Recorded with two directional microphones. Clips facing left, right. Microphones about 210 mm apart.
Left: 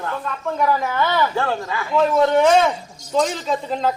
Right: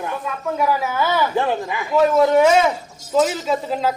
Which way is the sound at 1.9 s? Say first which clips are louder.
Right 2 dB; 5° right (ahead or behind).